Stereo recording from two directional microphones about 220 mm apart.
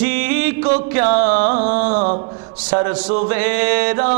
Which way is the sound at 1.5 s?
35° right (ahead or behind).